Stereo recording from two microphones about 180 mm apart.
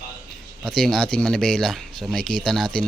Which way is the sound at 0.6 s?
Centre (ahead or behind).